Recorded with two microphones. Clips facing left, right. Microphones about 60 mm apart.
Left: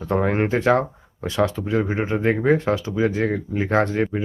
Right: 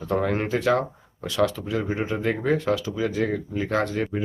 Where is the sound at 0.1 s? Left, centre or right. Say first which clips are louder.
Left 3 dB; left.